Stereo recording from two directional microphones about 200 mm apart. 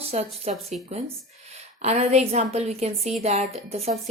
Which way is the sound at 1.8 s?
35° right (ahead or behind).